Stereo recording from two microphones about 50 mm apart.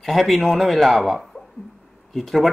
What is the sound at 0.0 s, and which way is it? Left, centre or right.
A man's voice, centre.